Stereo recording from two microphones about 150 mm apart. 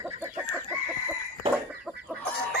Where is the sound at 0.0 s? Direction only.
15° right (ahead or behind).